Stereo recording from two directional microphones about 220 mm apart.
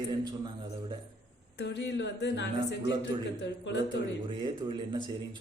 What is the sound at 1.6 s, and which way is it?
A woman's voice, 50° left (ahead or behind).